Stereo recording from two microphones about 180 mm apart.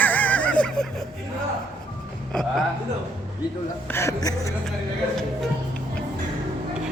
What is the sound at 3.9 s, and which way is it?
Speech, 15° left (ahead or behind).